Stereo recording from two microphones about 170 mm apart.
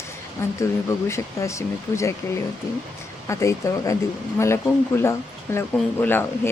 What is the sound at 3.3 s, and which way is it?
Speech, 20° left (ahead or behind).